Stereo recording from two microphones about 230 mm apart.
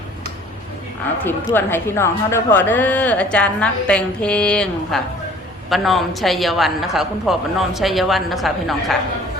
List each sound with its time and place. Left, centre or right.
1.2 s a woman's voice: centre